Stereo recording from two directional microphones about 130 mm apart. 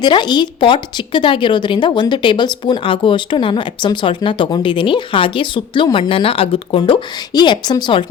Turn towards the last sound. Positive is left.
turn(degrees=35)  # may be behind; listen again after turning